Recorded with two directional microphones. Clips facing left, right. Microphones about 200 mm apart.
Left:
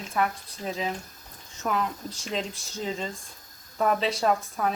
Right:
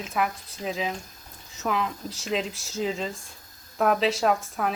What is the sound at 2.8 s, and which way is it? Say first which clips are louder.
A woman's voice: right 2 dB; 5° right (ahead or behind).